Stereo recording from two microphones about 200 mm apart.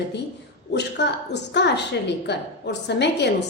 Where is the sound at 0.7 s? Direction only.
55° left (ahead or behind).